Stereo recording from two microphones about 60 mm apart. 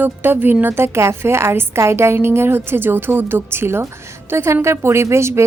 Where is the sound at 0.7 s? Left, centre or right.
Right.